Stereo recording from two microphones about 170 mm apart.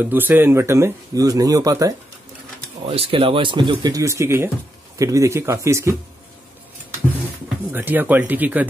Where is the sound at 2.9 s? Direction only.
30° right (ahead or behind); by 5.9 s 15° right (ahead or behind).